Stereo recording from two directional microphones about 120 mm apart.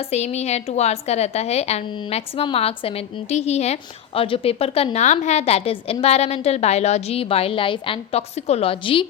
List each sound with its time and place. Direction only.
0.0 s a woman's voice: 60° left (ahead or behind); by 8.2 s 45° left (ahead or behind)
8.4 s a woman's voice: 60° left (ahead or behind); by 9.0 s 45° left (ahead or behind)